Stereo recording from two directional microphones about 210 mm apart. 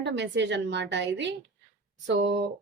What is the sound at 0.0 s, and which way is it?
A woman's voice, 60° right (ahead or behind).